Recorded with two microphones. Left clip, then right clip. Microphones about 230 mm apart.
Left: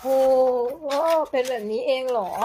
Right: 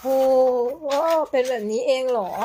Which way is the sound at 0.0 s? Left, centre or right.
Centre.